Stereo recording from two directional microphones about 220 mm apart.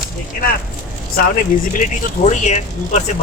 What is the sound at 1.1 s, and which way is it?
Speech, 40° left (ahead or behind).